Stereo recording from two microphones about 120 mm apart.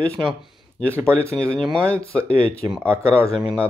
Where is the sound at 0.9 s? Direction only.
20° right (ahead or behind).